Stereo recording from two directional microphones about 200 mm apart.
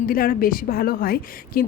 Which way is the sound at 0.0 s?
45° left (ahead or behind).